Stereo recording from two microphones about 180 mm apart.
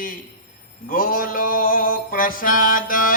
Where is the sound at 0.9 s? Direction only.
50° left (ahead or behind).